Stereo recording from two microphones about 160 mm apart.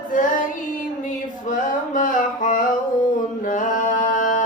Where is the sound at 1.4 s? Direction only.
55° left (ahead or behind).